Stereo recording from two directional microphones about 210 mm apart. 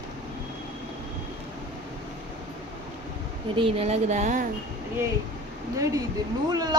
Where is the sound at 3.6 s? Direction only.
25° right (ahead or behind).